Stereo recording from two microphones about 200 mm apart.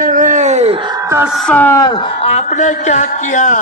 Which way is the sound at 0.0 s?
40° right (ahead or behind).